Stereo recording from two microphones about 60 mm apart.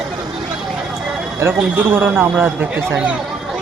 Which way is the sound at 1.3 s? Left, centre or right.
Right.